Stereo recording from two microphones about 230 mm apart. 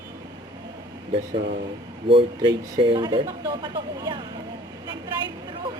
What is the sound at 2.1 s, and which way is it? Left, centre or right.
Speech, right.